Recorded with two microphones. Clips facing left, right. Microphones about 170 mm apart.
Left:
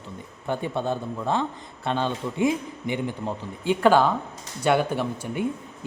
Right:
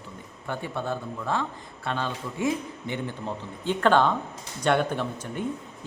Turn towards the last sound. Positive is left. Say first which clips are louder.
# left 3 dB
turn(degrees=10)  # may be behind; listen again after turning